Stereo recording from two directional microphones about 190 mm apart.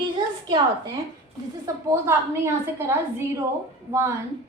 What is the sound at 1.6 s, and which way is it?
A woman's voice, 15° right (ahead or behind).